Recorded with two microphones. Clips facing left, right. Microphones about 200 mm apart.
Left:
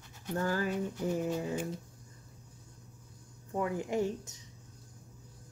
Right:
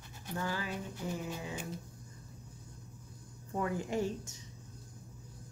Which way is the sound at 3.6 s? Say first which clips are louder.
Left 2 dB; 20° left (ahead or behind).